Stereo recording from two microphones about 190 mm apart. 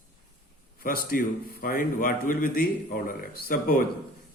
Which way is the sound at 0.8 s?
50° left (ahead or behind).